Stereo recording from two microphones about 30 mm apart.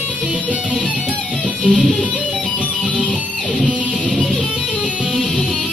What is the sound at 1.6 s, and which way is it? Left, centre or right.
Music, left.